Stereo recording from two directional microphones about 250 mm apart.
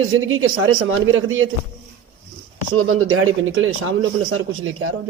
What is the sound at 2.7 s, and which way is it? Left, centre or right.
A man's voice, right.